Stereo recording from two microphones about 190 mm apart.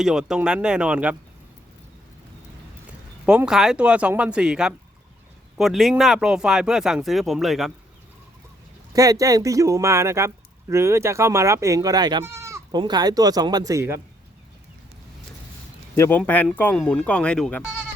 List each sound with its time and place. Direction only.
0.0 s speech: 5° right (ahead or behind)
3.2 s speech: 5° right (ahead or behind)
8.9 s speech: 20° right (ahead or behind)
16.0 s speech: 10° left (ahead or behind)